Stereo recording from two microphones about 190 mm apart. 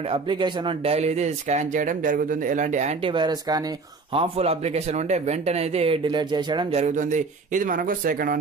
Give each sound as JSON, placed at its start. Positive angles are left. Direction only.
{"t": 0.1, "sound": "speech", "side_deg": -25}
{"t": 6.8, "sound": "speech", "side_deg": -40}